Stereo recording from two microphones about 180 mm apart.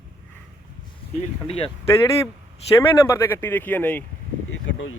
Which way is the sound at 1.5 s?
35° left (ahead or behind).